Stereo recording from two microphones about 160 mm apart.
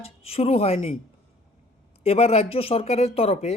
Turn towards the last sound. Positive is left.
turn(degrees=40)  # may be behind; listen again after turning